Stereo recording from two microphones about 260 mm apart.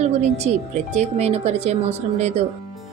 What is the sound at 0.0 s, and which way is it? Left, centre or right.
A woman's voice, right.